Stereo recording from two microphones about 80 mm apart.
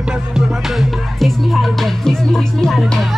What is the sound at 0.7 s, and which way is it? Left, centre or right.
Music, centre.